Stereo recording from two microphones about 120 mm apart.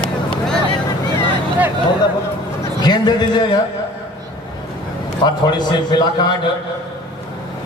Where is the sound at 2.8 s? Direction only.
35° left (ahead or behind).